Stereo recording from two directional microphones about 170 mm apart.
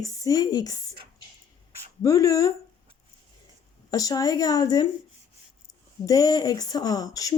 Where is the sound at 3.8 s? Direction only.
20° left (ahead or behind).